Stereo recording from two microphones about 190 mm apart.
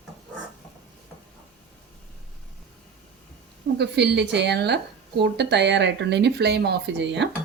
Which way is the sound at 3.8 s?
60° right (ahead or behind).